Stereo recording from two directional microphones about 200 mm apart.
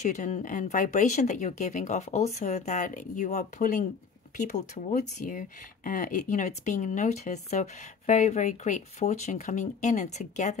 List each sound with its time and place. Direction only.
0.0 s speech: 35° left (ahead or behind)